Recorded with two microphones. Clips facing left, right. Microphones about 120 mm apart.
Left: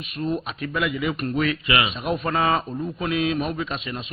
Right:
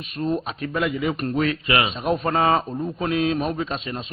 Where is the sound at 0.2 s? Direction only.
35° right (ahead or behind).